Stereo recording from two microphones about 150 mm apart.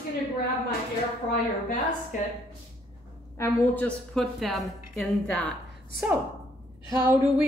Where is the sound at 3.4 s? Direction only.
20° left (ahead or behind).